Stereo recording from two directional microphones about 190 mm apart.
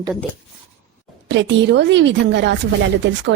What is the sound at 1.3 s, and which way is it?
A woman's voice, 70° right (ahead or behind).